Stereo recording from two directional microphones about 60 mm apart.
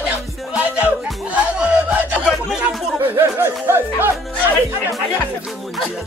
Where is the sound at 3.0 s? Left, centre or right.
Right.